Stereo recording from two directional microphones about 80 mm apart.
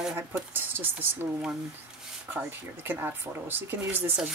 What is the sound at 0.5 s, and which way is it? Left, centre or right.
Speech, right.